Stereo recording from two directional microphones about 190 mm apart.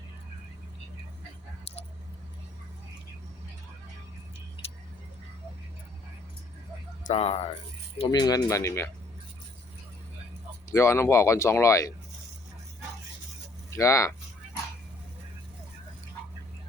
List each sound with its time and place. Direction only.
7.0 s speech: 35° left (ahead or behind); by 8.9 s 15° left (ahead or behind)
10.7 s speech: 15° left (ahead or behind)
13.7 s speech: 15° left (ahead or behind)